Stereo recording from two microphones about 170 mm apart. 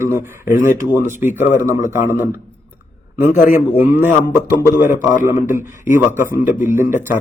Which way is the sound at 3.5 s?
15° right (ahead or behind).